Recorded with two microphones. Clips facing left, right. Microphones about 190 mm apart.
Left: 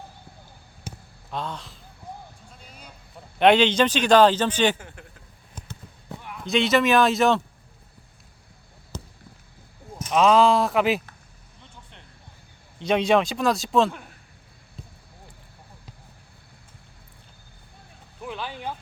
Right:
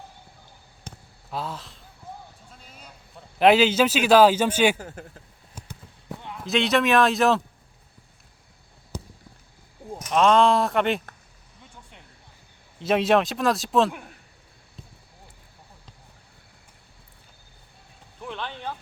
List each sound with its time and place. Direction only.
0.9 s basketball bounce: 5° left (ahead or behind)
1.3 s speech: 5° right (ahead or behind)
2.6 s a sound: centre (ahead or behind)
3.3 s speech: 5° right (ahead or behind)
4.8 s speech: 40° right (ahead or behind)
5.6 s basketball bounce: 10° right (ahead or behind)
6.4 s speech: centre (ahead or behind)
8.9 s a sound: 10° right (ahead or behind)
10.1 s speech: centre (ahead or behind)
12.8 s speech: 5° right (ahead or behind)
14.8 s basketball bounce: centre (ahead or behind)
18.2 s a sound: 5° left (ahead or behind)